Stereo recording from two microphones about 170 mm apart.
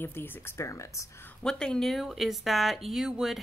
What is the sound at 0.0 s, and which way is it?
Speech, 10° left (ahead or behind).